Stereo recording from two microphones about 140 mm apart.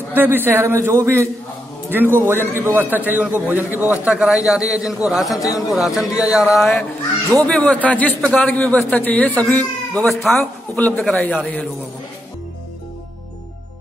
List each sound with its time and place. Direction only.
0.1 s a man's voice: 15° right (ahead or behind); by 10.3 s 5° left (ahead or behind)
10.3 s a man's voice: 15° left (ahead or behind)